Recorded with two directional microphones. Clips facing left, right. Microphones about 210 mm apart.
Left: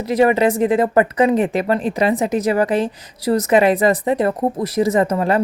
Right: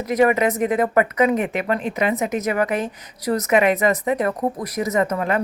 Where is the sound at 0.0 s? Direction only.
30° left (ahead or behind).